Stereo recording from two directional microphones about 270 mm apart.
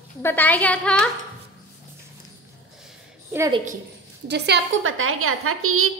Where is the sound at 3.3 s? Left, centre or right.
Centre.